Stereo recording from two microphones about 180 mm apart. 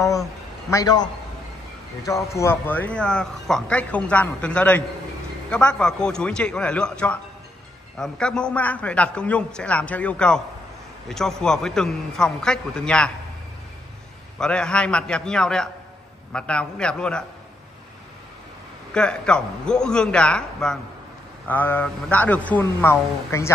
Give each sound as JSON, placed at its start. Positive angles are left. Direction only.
{"t": 0.7, "sound": "a man's voice", "side_deg": 20}
{"t": 2.3, "sound": "a man's voice", "side_deg": 15}
{"t": 14.4, "sound": "a man's voice", "side_deg": 5}
{"t": 18.9, "sound": "a man's voice", "side_deg": 5}